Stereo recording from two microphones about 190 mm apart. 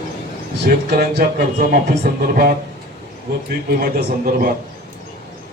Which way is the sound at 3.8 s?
50° right (ahead or behind).